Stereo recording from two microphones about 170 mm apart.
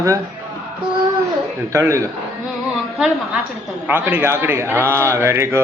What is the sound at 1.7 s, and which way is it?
Speech, 15° right (ahead or behind).